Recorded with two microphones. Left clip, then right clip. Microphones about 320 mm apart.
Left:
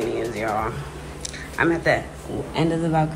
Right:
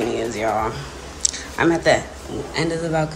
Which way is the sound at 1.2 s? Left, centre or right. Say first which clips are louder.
Right 3 dB; centre.